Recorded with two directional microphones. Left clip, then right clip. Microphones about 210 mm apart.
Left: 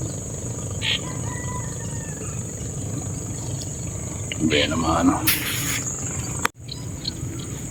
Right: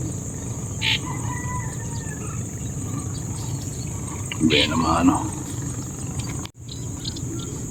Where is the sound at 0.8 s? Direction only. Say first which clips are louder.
Right 2 dB; 30° right (ahead or behind).